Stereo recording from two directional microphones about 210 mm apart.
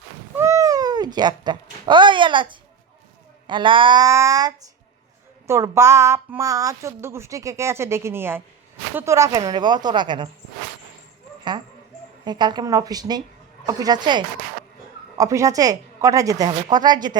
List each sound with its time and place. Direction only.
0.3 s a woman's voice: 15° right (ahead or behind)
12.2 s a woman's voice: 20° right (ahead or behind)